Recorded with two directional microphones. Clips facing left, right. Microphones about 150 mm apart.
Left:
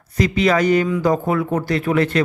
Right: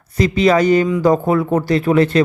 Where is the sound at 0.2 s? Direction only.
30° right (ahead or behind).